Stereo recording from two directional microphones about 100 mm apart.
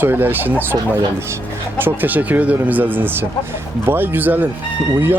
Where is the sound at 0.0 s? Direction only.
20° right (ahead or behind).